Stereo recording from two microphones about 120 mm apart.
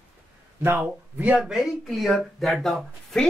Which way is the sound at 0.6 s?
15° right (ahead or behind).